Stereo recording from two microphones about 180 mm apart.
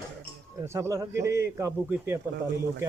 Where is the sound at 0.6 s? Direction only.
15° right (ahead or behind).